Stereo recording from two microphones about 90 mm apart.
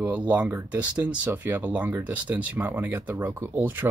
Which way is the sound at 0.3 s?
20° right (ahead or behind).